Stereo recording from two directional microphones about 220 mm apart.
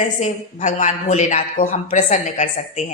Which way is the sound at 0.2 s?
35° left (ahead or behind).